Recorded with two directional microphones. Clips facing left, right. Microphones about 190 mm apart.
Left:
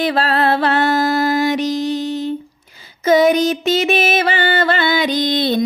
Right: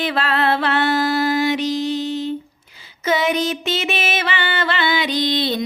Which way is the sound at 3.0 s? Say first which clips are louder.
Left 7 dB; 40° left (ahead or behind).